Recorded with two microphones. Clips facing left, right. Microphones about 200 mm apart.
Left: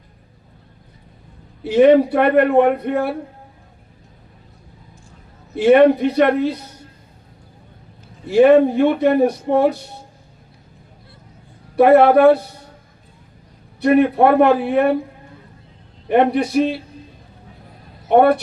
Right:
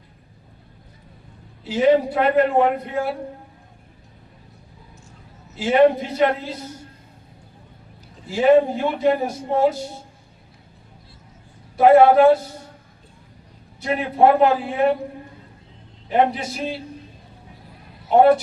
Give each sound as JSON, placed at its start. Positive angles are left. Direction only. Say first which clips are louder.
{"t": 1.6, "sound": "a man's voice", "louder": "left 6 dB", "side_deg": 60}
{"t": 5.5, "sound": "a man's voice", "louder": "left 5 dB", "side_deg": 60}
{"t": 8.3, "sound": "a man's voice", "louder": "left 4 dB", "side_deg": 65}
{"t": 11.8, "sound": "a man's voice", "louder": "left 2 dB", "side_deg": 65}
{"t": 13.8, "sound": "a man's voice", "louder": "left 4 dB", "side_deg": 60}
{"t": 16.0, "sound": "a man's voice", "louder": "left 5 dB", "side_deg": 60}
{"t": 18.1, "sound": "a man's voice", "louder": "left 1 dB", "side_deg": 60}